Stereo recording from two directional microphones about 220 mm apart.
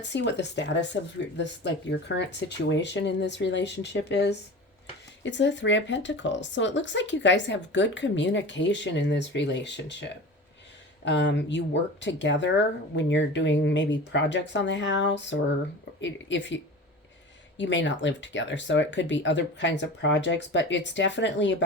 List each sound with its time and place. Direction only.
0.0 s speech: 55° left (ahead or behind)
17.6 s speech: 55° left (ahead or behind)